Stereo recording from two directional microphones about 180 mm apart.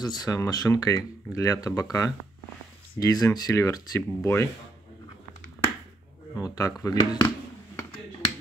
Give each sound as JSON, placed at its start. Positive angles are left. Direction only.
{"t": 0.0, "sound": "speech", "side_deg": 20}
{"t": 6.3, "sound": "speech", "side_deg": 20}